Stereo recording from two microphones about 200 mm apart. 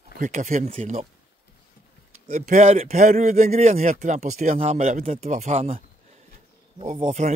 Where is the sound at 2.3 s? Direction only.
35° right (ahead or behind).